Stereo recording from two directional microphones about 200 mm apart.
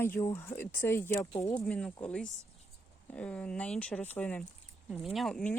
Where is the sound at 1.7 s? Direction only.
5° left (ahead or behind).